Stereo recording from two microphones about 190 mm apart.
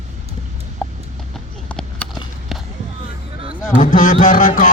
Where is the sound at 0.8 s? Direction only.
5° left (ahead or behind).